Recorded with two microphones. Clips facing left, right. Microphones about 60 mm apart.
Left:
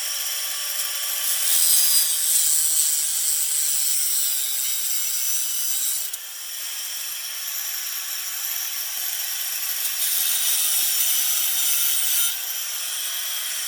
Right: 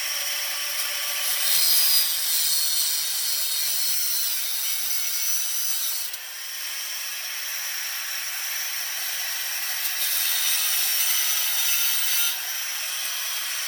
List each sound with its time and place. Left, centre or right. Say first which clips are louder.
1.3 s wood: right 2 dB; right
10.1 s wood: right 1 dB; right